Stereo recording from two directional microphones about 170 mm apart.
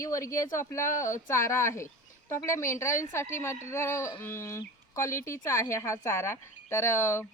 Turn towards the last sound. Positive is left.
turn(degrees=15)  # may be behind; listen again after turning